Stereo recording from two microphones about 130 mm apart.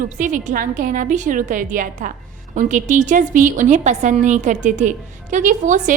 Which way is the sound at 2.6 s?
70° right (ahead or behind).